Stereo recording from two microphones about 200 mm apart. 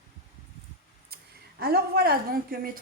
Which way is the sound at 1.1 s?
50° right (ahead or behind).